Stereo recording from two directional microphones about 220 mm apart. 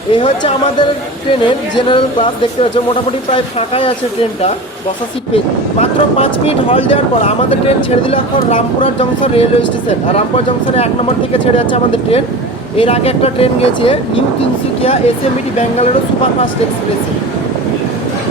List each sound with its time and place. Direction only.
0.1 s speech: 20° left (ahead or behind)
5.8 s speech: 25° left (ahead or behind)